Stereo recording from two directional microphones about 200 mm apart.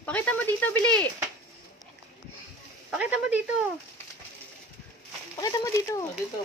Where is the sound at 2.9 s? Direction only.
5° right (ahead or behind).